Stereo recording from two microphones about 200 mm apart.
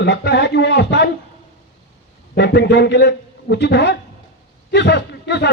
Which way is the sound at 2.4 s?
60° left (ahead or behind).